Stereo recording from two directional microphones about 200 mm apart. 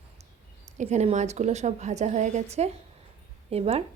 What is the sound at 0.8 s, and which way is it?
A woman's voice, 35° right (ahead or behind).